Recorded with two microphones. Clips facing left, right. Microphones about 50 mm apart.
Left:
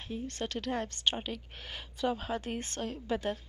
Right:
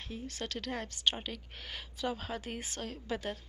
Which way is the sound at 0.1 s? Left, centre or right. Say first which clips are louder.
Left 4 dB; centre.